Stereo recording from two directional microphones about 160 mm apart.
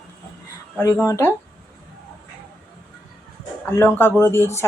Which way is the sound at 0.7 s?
15° left (ahead or behind).